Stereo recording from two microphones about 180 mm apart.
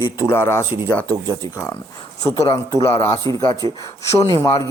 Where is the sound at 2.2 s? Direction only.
15° left (ahead or behind).